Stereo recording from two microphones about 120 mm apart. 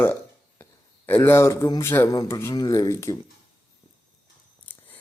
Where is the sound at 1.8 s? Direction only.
20° left (ahead or behind).